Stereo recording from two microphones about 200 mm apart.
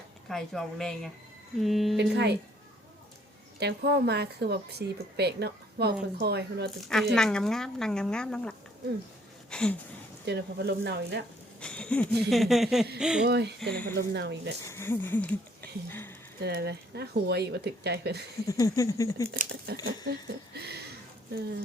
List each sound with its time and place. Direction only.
0.3 s speech: centre (ahead or behind)
2.0 s a woman's voice: 60° right (ahead or behind)
3.6 s a woman's voice: 55° right (ahead or behind)
6.7 s speech: centre (ahead or behind)
10.2 s a woman's voice: 55° right (ahead or behind)
11.6 s speech: 5° left (ahead or behind)
13.2 s a woman's voice: 55° right (ahead or behind)
13.6 s speech: 5° left (ahead or behind)
14.1 s a woman's voice: 60° right (ahead or behind)
14.6 s a sound: 15° left (ahead or behind)
16.4 s a woman's voice: 55° right (ahead or behind)
18.4 s a sound: 15° left (ahead or behind)
19.3 s speech: 45° right (ahead or behind)
20.1 s speech: 55° right (ahead or behind)